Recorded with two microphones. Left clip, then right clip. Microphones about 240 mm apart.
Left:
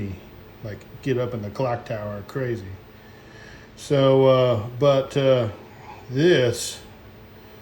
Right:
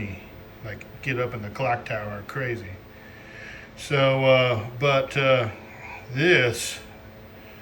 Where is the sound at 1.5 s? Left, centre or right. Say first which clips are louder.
Right 1 dB; centre.